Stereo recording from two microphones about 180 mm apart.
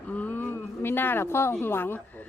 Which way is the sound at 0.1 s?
10° left (ahead or behind).